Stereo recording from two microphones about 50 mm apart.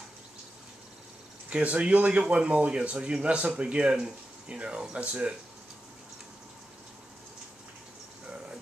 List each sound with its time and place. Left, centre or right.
1.5 s speech: right